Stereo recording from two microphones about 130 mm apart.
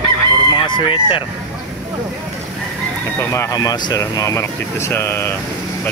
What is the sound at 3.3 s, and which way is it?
Speech, 25° left (ahead or behind).